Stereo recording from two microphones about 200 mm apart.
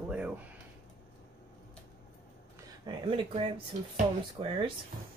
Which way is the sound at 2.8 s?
25° right (ahead or behind).